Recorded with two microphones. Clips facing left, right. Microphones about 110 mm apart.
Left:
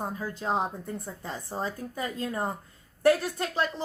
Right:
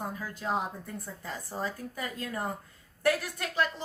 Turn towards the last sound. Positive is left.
turn(degrees=30)  # may be behind; listen again after turning